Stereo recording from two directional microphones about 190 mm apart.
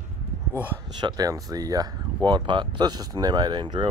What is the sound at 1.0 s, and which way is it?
Speech, 20° right (ahead or behind).